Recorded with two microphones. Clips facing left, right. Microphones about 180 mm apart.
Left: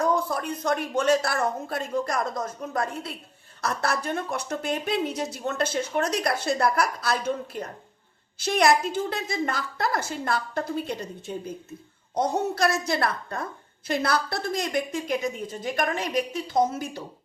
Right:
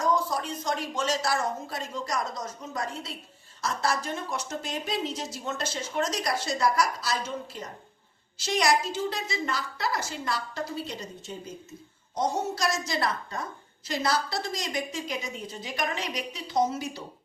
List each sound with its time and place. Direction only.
0.0 s a woman's voice: 55° left (ahead or behind)